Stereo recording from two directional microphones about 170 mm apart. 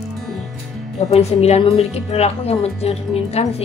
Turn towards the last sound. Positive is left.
turn(degrees=35)  # may be behind; listen again after turning